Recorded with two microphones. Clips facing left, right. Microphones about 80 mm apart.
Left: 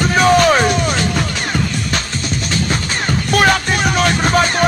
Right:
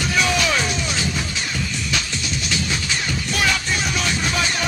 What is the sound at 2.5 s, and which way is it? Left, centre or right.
Music, left.